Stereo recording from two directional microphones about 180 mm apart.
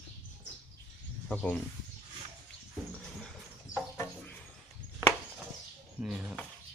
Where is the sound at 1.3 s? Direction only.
10° left (ahead or behind).